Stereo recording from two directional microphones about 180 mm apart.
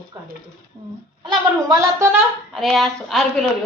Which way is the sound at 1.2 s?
20° right (ahead or behind).